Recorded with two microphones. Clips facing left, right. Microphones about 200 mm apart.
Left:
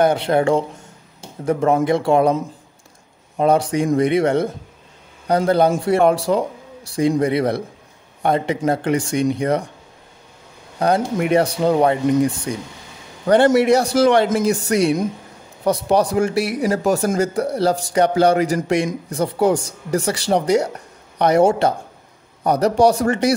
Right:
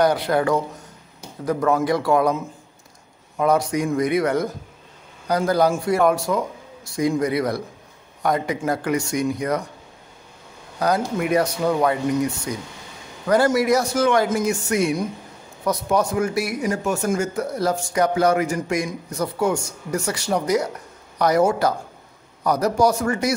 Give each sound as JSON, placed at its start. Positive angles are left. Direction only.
{"t": 0.0, "sound": "a man's voice", "side_deg": 25}
{"t": 3.3, "sound": "a man's voice", "side_deg": 30}
{"t": 11.2, "sound": "a man's voice", "side_deg": 30}